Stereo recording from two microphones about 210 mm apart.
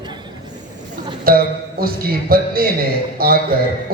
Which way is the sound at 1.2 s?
45° right (ahead or behind).